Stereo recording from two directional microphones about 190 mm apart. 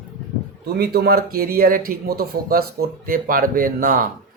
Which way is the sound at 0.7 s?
55° right (ahead or behind).